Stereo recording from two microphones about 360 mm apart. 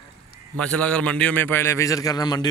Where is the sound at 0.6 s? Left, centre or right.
Centre.